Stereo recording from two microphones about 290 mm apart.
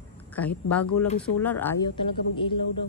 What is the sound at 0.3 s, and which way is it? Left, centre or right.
Speech, centre.